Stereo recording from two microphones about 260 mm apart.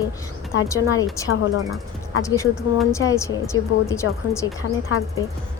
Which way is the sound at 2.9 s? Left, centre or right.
Centre.